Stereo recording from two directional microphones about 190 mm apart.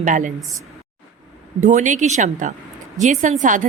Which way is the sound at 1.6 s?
40° right (ahead or behind).